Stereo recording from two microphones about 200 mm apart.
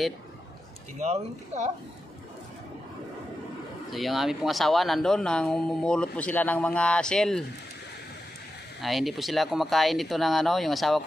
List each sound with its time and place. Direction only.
1.0 s speech: 35° right (ahead or behind)
3.9 s speech: centre (ahead or behind)
8.8 s speech: centre (ahead or behind)